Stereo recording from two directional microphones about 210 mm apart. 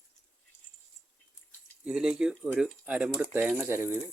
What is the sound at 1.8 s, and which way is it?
Speech, 5° right (ahead or behind).